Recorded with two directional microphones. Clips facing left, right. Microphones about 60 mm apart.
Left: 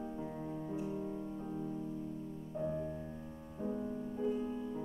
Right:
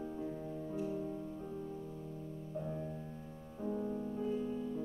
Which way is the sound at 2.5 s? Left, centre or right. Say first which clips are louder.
Left 4 dB; centre.